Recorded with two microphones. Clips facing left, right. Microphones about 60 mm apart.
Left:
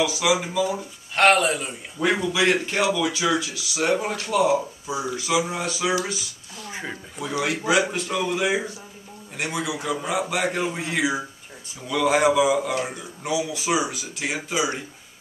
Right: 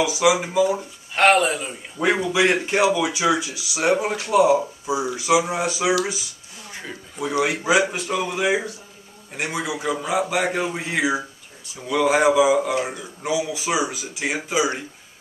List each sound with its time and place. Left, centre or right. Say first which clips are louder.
0.0 s speech: right 3 dB; centre
0.7 s a man's voice: right 1 dB; centre
6.7 s a sound: left 2 dB; centre
7.2 s a man's voice: right 4 dB; centre